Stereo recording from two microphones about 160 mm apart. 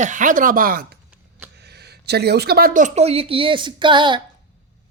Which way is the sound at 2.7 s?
45° right (ahead or behind).